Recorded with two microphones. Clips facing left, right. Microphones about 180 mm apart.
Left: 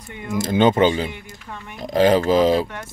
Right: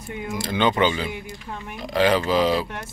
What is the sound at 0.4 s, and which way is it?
Speech, 45° left (ahead or behind).